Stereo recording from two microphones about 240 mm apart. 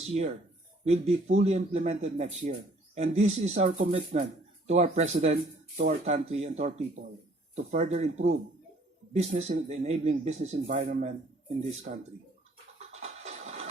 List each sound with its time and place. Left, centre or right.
0.1 s a man's voice: right
12.9 s music: right